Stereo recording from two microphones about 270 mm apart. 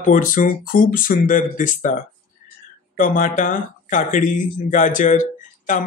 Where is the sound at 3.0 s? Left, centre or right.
Left.